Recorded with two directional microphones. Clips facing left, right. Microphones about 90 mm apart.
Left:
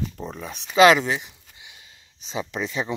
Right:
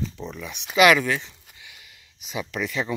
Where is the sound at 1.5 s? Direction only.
25° left (ahead or behind).